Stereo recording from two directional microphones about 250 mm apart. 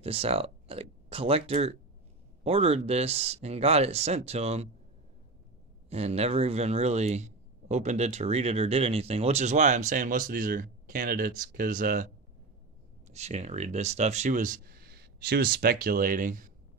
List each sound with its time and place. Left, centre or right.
0.0 s speech: right
5.9 s speech: right
13.1 s speech: right